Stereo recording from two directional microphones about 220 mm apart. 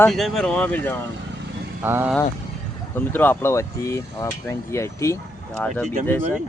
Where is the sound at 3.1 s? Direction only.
10° left (ahead or behind).